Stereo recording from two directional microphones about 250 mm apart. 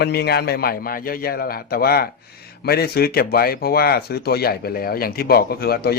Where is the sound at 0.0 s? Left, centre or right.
Left.